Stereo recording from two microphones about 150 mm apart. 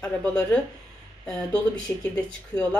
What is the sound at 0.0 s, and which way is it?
Speech, 5° left (ahead or behind).